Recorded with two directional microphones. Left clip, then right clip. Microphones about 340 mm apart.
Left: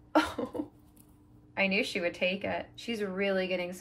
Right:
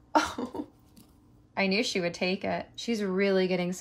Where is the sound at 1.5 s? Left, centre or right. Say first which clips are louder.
Right 1 dB; centre.